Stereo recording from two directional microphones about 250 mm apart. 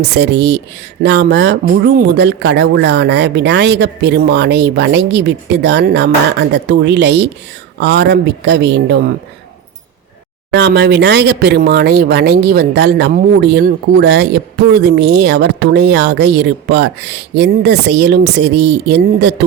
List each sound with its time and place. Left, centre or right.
0.0 s speech: right
10.5 s speech: right